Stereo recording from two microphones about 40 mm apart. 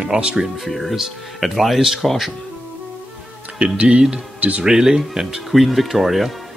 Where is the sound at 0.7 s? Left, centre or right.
Centre.